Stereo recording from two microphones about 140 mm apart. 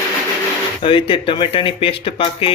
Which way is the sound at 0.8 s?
40° left (ahead or behind).